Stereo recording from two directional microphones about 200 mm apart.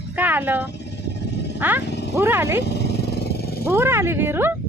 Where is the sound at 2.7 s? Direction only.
55° left (ahead or behind).